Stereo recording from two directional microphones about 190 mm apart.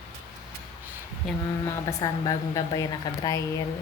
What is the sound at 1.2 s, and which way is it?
Mantra, centre (ahead or behind).